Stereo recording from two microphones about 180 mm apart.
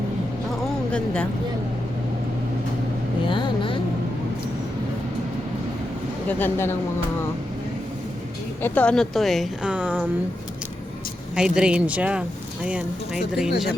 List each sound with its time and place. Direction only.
0.9 s a woman's voice: 5° left (ahead or behind)
3.2 s vehicle: 25° left (ahead or behind)
6.2 s speech: 10° left (ahead or behind)
8.6 s a woman's voice: 10° left (ahead or behind); by 10.0 s 10° right (ahead or behind)
11.3 s a woman's voice: 5° right (ahead or behind)